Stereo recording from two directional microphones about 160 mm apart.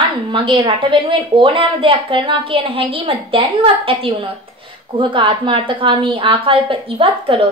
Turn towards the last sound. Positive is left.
turn(degrees=-35)  # may be behind; listen again after turning